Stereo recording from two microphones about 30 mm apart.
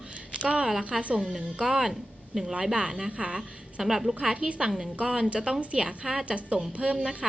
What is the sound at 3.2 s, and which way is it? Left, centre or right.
Speech, right.